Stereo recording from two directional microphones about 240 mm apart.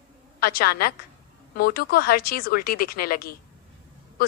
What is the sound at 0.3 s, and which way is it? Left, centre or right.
A woman's voice, left.